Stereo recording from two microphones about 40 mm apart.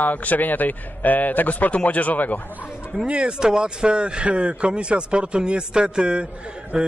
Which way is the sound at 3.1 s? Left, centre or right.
Right.